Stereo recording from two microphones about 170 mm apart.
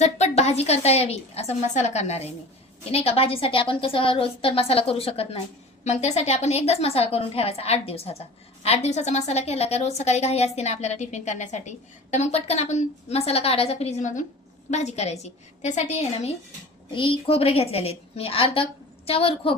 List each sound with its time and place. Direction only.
0.0 s a woman's voice: 40° left (ahead or behind)
16.9 s a woman's voice: 30° left (ahead or behind)